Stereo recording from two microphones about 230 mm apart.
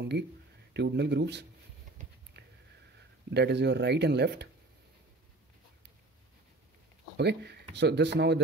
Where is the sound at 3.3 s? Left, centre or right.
Right.